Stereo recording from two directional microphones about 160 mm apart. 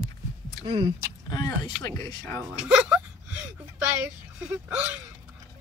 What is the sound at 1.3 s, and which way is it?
Speech, 25° left (ahead or behind).